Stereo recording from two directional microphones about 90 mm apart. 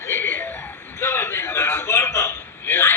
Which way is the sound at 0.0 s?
25° left (ahead or behind).